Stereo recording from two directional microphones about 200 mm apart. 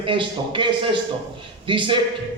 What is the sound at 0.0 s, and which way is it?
A man's voice, 25° right (ahead or behind).